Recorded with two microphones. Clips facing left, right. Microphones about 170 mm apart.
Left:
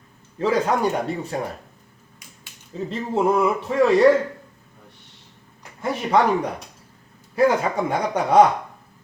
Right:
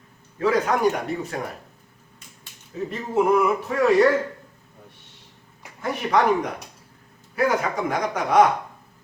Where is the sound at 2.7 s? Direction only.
25° left (ahead or behind).